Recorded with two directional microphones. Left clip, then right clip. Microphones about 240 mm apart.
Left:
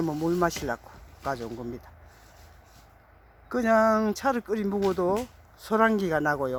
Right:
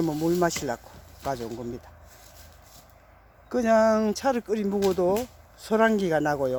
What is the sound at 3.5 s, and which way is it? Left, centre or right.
Speech, centre.